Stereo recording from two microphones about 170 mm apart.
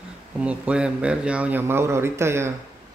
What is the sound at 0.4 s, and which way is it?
A man's voice, 5° right (ahead or behind).